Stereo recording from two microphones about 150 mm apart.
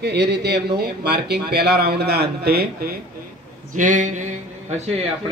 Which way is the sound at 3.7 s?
60° right (ahead or behind).